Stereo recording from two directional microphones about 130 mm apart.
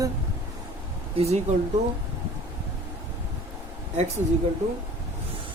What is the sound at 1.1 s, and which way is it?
Speech, 55° right (ahead or behind).